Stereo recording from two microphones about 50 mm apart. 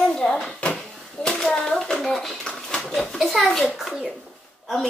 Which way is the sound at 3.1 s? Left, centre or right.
Centre.